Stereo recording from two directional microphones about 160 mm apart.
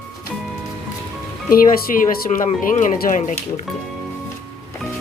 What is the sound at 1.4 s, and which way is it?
Speech, 65° left (ahead or behind).